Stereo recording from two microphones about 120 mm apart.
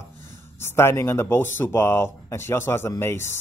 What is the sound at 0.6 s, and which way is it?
A man's voice, 20° left (ahead or behind).